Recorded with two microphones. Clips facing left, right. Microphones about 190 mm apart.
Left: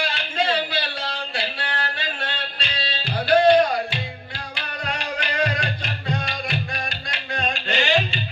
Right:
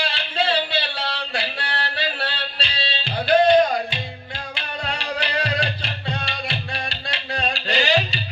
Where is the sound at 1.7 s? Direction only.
35° right (ahead or behind).